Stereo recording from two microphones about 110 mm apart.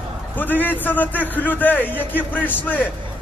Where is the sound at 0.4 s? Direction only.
15° left (ahead or behind).